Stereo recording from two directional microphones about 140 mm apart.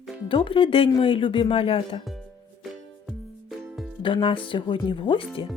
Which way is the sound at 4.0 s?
40° left (ahead or behind).